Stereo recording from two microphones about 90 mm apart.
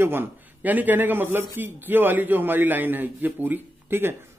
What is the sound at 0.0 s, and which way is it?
A man's voice, 25° right (ahead or behind).